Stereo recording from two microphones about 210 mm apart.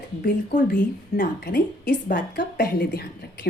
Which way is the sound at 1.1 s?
40° left (ahead or behind).